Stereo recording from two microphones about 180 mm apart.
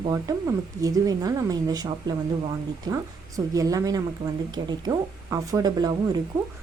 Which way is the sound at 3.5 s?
20° right (ahead or behind).